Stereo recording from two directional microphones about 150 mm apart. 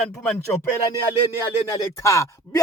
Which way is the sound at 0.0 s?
5° left (ahead or behind).